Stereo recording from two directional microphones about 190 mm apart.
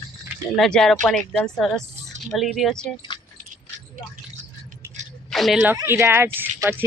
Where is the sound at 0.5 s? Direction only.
Centre (ahead or behind).